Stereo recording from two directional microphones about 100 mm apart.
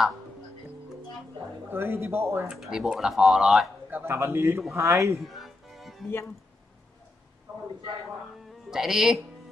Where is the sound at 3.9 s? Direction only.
25° right (ahead or behind).